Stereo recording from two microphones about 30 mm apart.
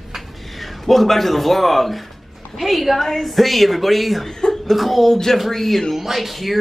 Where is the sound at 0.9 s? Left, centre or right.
Centre.